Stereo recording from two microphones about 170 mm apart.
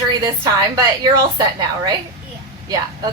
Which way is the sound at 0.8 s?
25° right (ahead or behind).